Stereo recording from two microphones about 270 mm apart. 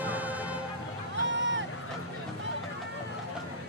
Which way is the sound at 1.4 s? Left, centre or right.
Right.